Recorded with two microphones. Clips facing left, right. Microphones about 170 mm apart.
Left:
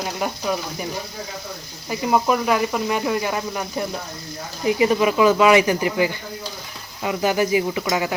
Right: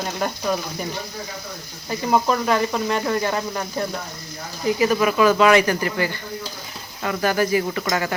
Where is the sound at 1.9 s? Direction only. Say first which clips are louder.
Left 1 dB; 5° left (ahead or behind).